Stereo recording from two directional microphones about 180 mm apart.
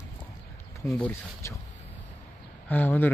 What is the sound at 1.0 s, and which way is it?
Speech, 10° left (ahead or behind).